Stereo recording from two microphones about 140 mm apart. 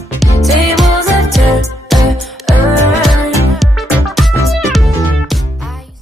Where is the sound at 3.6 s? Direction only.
Centre (ahead or behind).